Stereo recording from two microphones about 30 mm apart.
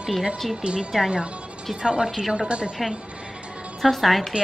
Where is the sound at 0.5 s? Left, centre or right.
Right.